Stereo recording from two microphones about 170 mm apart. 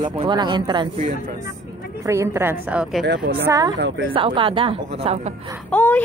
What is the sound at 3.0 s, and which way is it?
Speech, 70° right (ahead or behind).